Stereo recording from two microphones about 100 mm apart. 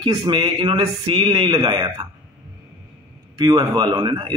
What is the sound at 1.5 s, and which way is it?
Speech, 40° right (ahead or behind).